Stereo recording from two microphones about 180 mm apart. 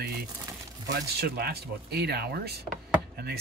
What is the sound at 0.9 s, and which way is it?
Speech, 65° right (ahead or behind).